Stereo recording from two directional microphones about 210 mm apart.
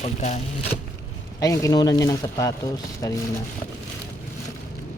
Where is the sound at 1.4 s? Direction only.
15° left (ahead or behind).